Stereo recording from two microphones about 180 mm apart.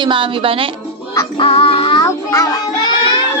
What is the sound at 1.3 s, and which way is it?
Music, 30° left (ahead or behind).